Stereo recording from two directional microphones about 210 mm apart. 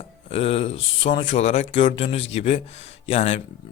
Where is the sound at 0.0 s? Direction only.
30° left (ahead or behind).